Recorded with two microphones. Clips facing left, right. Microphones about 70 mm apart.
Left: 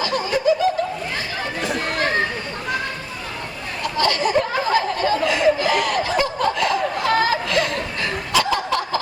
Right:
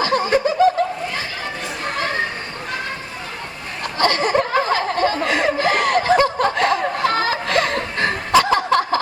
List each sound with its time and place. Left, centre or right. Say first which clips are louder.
0.0 s snicker: right 3 dB; right
3.9 s chuckle: right 2 dB; right